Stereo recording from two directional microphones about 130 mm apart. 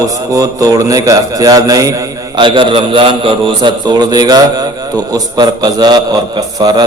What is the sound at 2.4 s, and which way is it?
A man's voice, 40° right (ahead or behind).